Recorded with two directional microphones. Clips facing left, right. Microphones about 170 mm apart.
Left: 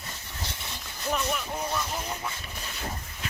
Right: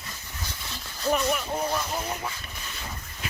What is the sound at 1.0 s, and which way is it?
Speech, 15° right (ahead or behind).